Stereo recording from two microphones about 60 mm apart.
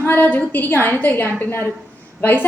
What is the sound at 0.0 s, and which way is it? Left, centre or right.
A woman's voice, left.